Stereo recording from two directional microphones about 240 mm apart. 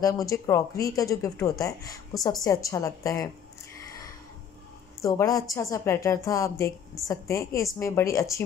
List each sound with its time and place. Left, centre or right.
0.0 s speech: centre
5.0 s speech: centre